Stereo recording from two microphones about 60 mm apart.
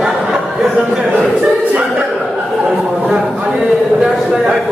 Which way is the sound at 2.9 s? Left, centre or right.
Centre.